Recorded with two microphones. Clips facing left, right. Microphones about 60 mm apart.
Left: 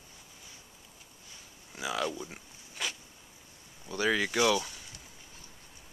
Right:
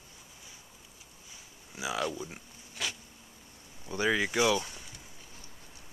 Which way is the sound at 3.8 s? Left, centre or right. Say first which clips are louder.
Even; centre.